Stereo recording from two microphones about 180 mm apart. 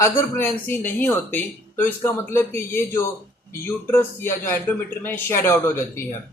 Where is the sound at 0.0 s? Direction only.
15° left (ahead or behind).